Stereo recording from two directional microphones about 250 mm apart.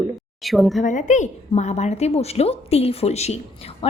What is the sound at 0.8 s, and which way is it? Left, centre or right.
A woman's voice, left.